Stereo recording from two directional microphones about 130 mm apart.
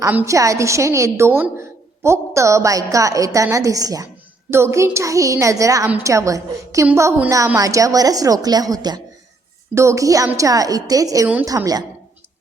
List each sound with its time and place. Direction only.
0.3 s a woman's voice: 25° right (ahead or behind)